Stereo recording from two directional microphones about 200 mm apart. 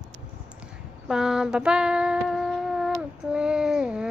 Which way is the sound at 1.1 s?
5° right (ahead or behind).